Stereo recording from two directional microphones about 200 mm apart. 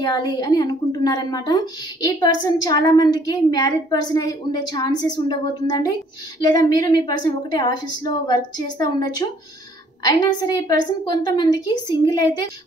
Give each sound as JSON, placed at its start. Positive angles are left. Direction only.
{"t": 0.0, "sound": "a woman's voice", "side_deg": 20}
{"t": 10.4, "sound": "a woman's voice", "side_deg": 20}